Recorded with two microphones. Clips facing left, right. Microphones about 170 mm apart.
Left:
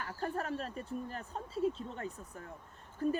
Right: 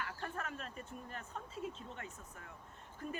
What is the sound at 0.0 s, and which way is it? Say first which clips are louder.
Speech: left 6 dB; 35° left (ahead or behind).